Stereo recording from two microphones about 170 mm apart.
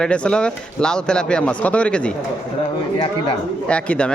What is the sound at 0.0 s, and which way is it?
Speech, 5° left (ahead or behind).